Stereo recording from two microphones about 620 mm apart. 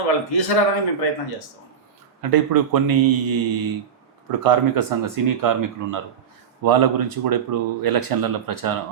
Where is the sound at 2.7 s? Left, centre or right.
Right.